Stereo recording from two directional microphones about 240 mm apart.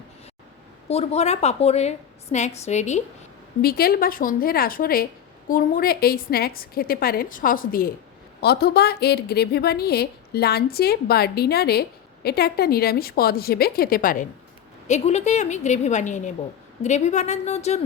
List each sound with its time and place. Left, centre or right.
0.9 s a woman's voice: left
3.6 s a woman's voice: left